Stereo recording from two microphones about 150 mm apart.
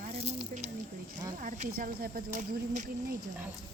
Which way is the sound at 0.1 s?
45° right (ahead or behind).